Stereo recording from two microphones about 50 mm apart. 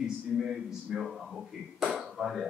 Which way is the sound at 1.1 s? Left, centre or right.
Centre.